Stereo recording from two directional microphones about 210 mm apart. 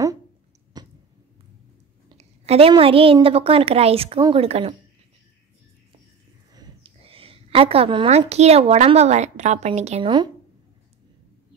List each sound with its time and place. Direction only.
0.8 s a sound: 20° right (ahead or behind)
2.0 s a woman's voice: 30° right (ahead or behind)
6.5 s a woman's voice: 25° right (ahead or behind)